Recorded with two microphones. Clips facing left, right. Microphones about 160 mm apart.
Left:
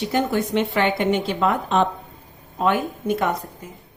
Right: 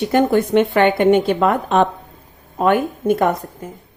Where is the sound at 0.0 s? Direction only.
55° right (ahead or behind).